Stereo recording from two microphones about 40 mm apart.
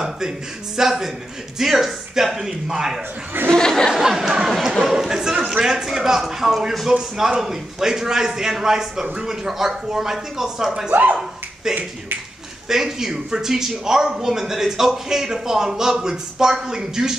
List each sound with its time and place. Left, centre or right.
0.7 s speech: centre
3.5 s speech: centre
3.9 s speech: centre
10.9 s speech: right
12.6 s speech: centre